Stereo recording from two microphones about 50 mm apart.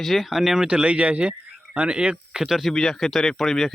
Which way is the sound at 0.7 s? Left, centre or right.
Right.